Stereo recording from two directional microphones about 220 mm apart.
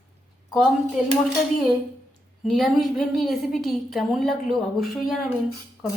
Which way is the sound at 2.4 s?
Centre (ahead or behind).